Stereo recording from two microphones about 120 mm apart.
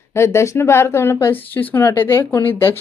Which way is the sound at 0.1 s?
20° left (ahead or behind).